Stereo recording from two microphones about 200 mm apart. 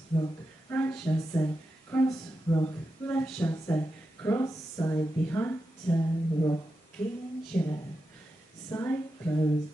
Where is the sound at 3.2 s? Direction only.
5° left (ahead or behind).